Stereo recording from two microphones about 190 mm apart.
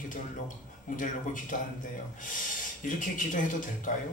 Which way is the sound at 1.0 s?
45° left (ahead or behind).